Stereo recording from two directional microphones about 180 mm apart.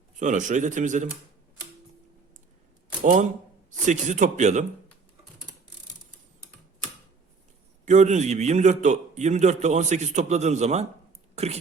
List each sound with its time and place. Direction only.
0.2 s speech: 45° right (ahead or behind)
3.0 s speech: 45° right (ahead or behind)
7.9 s a man's voice: 40° right (ahead or behind)